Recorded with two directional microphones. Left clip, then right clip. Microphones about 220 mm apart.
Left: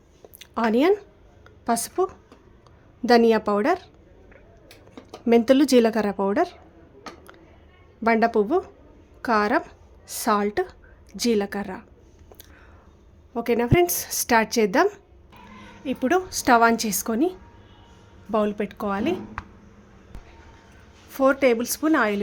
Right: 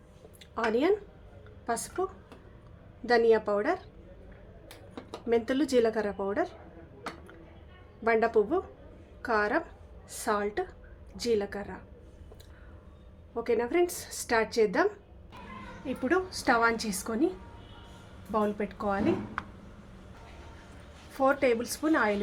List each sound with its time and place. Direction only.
0.3 s a sound: 50° left (ahead or behind)
1.6 s a woman's voice: 50° left (ahead or behind)
3.1 s a woman's voice: 50° left (ahead or behind)
5.3 s a woman's voice: 50° left (ahead or behind)
8.0 s a woman's voice: 45° left (ahead or behind)
13.3 s a woman's voice: 50° left (ahead or behind)
15.9 s a woman's voice: 45° left (ahead or behind)
18.3 s a woman's voice: 45° left (ahead or behind)
21.1 s a woman's voice: 50° left (ahead or behind)